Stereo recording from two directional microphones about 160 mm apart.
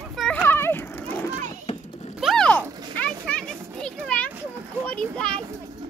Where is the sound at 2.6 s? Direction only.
25° right (ahead or behind).